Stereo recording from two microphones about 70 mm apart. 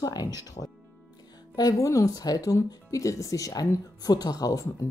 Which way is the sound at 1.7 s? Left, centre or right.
Left.